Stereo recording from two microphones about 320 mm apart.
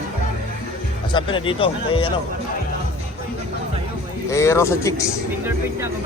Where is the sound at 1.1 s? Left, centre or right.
Centre.